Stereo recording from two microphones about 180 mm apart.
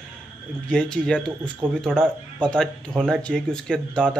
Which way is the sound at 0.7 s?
5° left (ahead or behind).